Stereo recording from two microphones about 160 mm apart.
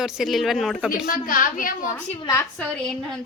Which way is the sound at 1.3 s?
60° left (ahead or behind).